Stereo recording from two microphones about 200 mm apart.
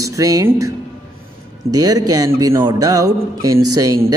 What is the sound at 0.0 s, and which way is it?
Speech, 15° right (ahead or behind).